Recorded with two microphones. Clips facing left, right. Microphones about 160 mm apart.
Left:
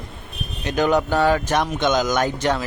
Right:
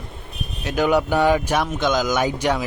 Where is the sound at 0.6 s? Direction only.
5° right (ahead or behind).